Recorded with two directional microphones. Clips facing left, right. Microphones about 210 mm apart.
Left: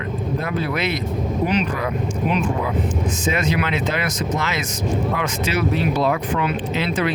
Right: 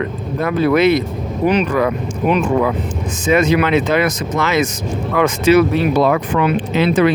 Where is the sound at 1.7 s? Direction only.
75° right (ahead or behind).